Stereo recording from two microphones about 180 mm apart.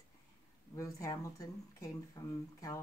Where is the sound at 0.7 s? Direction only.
20° left (ahead or behind).